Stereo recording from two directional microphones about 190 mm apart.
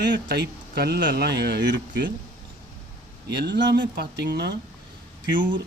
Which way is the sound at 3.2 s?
65° right (ahead or behind).